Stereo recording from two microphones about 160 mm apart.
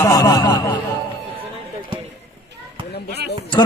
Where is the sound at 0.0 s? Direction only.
25° left (ahead or behind).